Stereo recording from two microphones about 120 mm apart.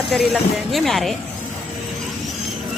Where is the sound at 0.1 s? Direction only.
5° left (ahead or behind).